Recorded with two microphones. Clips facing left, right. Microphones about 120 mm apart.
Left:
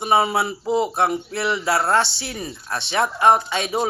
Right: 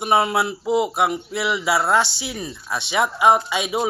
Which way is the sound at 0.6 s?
10° right (ahead or behind).